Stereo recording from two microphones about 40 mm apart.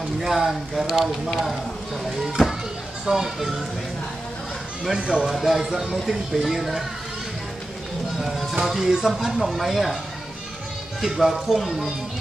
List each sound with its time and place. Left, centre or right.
0.2 s speech: centre
4.9 s speech: centre
5.3 s speech: centre
8.2 s speech: centre
11.4 s speech: centre